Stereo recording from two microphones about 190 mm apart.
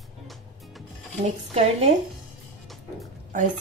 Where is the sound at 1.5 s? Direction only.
35° right (ahead or behind).